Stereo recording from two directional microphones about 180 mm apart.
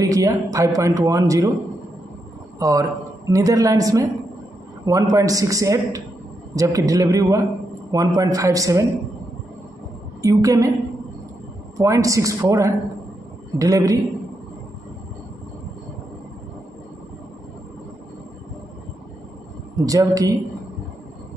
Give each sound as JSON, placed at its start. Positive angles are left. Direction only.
{"t": 0.0, "sound": "speech", "side_deg": -15}
{"t": 2.6, "sound": "speech", "side_deg": -20}
{"t": 10.2, "sound": "speech", "side_deg": -20}
{"t": 11.8, "sound": "speech", "side_deg": -20}
{"t": 19.8, "sound": "speech", "side_deg": -20}